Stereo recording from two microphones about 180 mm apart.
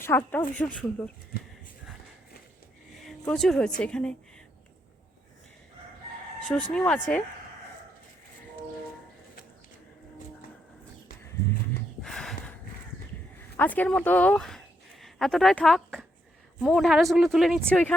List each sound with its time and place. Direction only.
0.0 s speech: 10° left (ahead or behind)
1.3 s speech: 60° left (ahead or behind)
3.0 s speech: centre (ahead or behind)
6.5 s speech: 5° left (ahead or behind)
12.0 s a sound: 5° left (ahead or behind)
13.6 s speech: 10° left (ahead or behind)